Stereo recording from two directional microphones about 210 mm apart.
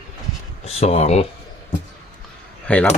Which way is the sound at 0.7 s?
30° left (ahead or behind).